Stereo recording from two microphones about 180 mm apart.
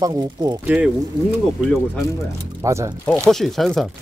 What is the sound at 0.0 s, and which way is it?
Speech, 20° right (ahead or behind).